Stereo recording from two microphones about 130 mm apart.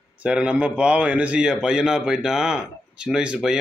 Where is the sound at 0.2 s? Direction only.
10° right (ahead or behind).